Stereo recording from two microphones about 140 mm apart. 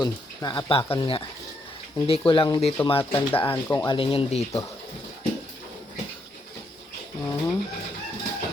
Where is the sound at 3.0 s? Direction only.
15° left (ahead or behind).